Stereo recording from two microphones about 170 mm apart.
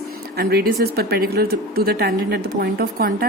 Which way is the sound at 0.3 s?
65° right (ahead or behind).